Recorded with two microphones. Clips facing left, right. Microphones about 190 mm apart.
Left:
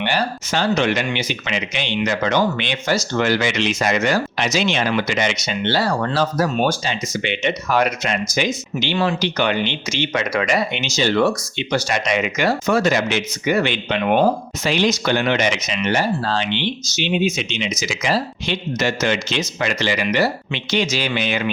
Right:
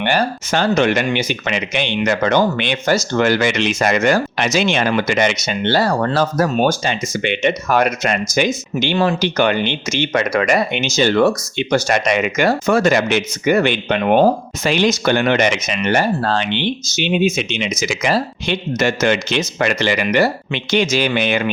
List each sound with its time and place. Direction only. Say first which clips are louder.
0.0 s speech: right 4 dB; 50° right (ahead or behind)